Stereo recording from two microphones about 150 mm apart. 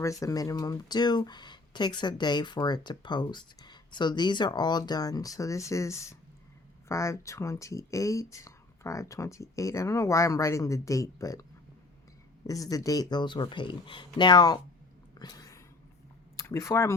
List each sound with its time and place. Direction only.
0.0 s speech: 20° left (ahead or behind)
12.5 s speech: 25° left (ahead or behind)
15.2 s a sound: 25° left (ahead or behind)
16.4 s speech: 20° left (ahead or behind)